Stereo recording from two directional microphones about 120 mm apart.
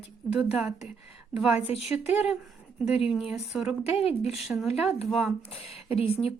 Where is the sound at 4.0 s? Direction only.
60° left (ahead or behind).